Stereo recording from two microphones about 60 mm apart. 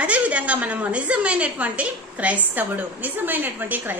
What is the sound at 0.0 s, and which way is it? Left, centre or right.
A woman's voice, right.